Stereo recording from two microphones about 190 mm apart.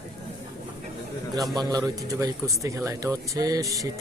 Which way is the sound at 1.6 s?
20° right (ahead or behind).